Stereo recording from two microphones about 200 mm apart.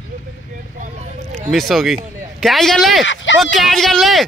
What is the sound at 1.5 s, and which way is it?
Speech, centre (ahead or behind).